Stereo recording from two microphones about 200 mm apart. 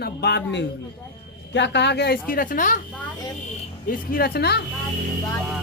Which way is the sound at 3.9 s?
45° left (ahead or behind).